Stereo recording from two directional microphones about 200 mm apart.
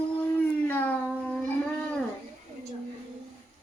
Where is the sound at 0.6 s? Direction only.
10° left (ahead or behind).